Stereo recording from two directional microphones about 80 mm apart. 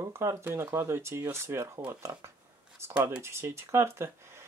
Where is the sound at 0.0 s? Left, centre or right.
Right.